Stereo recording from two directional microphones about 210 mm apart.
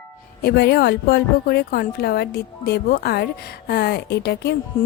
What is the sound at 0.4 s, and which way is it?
Speech, 50° left (ahead or behind).